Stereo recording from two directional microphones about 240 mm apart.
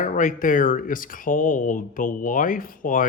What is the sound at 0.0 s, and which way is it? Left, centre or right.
Speech, left.